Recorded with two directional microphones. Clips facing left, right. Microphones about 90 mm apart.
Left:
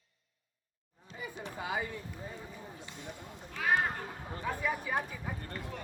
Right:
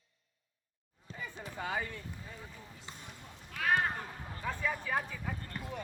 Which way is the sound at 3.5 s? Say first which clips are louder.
Left 1 dB; 5° left (ahead or behind).